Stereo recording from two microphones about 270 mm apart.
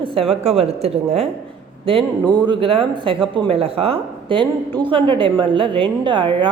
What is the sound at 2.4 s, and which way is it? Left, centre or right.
A woman's voice, centre.